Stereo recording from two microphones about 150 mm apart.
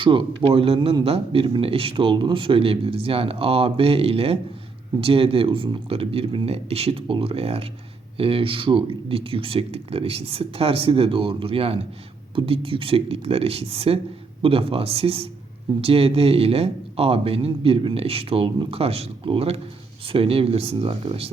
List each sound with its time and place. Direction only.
0.0 s speech: 35° right (ahead or behind)